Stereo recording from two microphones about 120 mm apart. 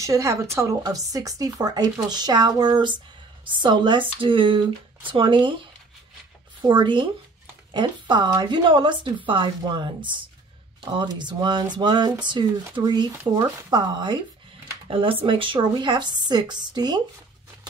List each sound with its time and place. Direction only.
0.0 s speech: 25° right (ahead or behind); by 5.6 s 45° right (ahead or behind)
6.6 s speech: 40° right (ahead or behind)
14.9 s speech: 50° right (ahead or behind)